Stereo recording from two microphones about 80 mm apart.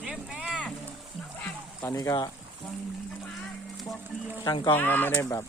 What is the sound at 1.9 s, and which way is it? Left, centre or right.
Speech, left.